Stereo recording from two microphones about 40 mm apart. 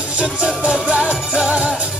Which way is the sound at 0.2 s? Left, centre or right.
Right.